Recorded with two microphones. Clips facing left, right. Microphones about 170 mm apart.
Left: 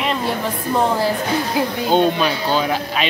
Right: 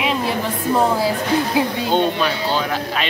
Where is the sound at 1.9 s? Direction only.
5° left (ahead or behind).